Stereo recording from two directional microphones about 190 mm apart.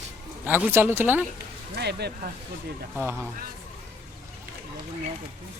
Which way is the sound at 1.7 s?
60° right (ahead or behind).